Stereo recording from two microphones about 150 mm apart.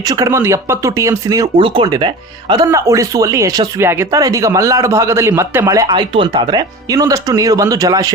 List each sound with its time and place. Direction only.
0.0 s speech: 25° right (ahead or behind)
1.5 s speech: 35° right (ahead or behind)
2.6 s speech: 20° right (ahead or behind)